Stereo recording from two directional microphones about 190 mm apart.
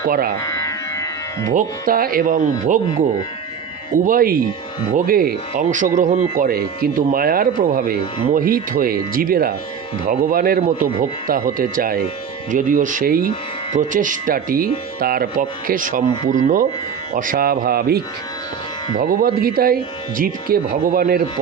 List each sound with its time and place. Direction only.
0.4 s music: 15° left (ahead or behind)
1.5 s speech: 45° right (ahead or behind)
3.9 s speech: 45° right (ahead or behind)